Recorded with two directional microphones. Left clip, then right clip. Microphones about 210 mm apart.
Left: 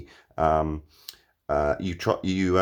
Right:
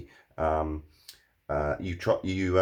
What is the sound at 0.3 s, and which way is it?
Speech, 40° left (ahead or behind).